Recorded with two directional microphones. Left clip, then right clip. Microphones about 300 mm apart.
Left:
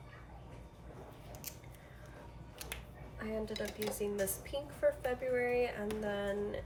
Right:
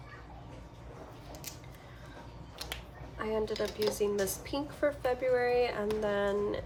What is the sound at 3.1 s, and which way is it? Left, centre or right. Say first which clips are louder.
Speech: right 7 dB; centre.